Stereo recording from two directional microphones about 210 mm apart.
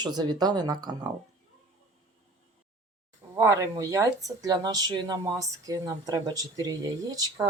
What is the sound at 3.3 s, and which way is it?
Speech, 15° right (ahead or behind).